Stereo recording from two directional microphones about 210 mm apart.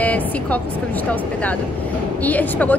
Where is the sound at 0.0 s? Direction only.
5° left (ahead or behind).